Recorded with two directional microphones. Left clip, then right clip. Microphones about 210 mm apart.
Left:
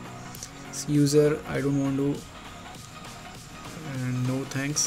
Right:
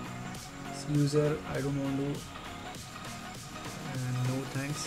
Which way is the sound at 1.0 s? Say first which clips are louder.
Left 8 dB; 30° left (ahead or behind).